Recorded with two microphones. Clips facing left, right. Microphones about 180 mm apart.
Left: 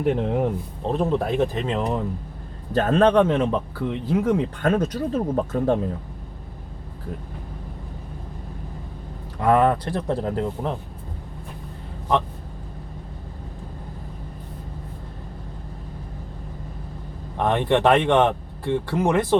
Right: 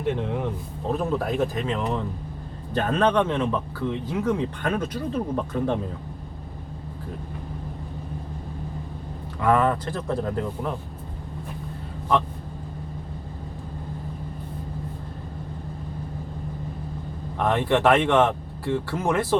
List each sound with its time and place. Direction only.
0.0 s speech: 45° left (ahead or behind)
0.9 s speech: 25° left (ahead or behind)
2.7 s speech: 40° left (ahead or behind)
3.8 s speech: 5° left (ahead or behind)
4.2 s speech: 40° left (ahead or behind)
9.4 s speech: 35° left (ahead or behind)
17.3 s speech: 20° left (ahead or behind)